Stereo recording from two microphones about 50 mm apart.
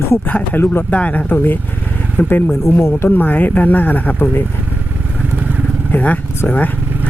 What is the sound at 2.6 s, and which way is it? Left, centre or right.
Speech, left.